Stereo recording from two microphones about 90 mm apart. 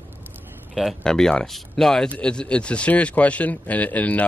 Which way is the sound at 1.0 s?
10° left (ahead or behind).